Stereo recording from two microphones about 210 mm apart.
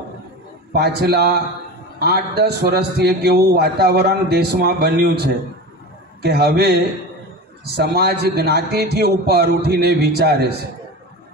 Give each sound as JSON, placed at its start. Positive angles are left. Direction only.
{"t": 0.7, "sound": "a man's voice", "side_deg": -50}